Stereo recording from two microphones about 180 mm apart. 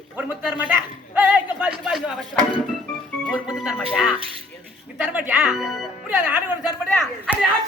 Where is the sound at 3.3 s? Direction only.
5° right (ahead or behind).